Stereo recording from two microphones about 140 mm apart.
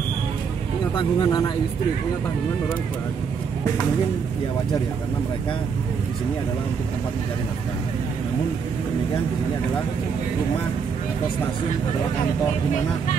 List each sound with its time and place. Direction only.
0.9 s speech: 30° left (ahead or behind)